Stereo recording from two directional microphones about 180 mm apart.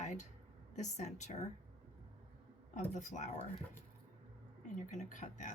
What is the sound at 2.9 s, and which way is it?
Speech, 45° left (ahead or behind).